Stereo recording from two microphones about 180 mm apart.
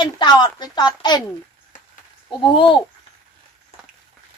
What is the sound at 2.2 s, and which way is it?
Speech, 25° left (ahead or behind).